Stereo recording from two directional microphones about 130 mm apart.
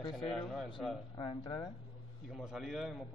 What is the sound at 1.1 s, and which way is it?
Speech, 35° left (ahead or behind).